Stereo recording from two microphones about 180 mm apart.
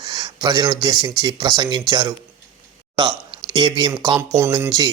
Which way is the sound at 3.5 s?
25° right (ahead or behind).